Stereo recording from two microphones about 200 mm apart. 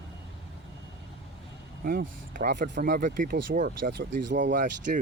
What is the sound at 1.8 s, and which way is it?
Speech, 45° right (ahead or behind).